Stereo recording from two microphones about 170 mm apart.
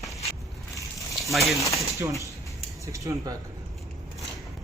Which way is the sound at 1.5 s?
20° left (ahead or behind).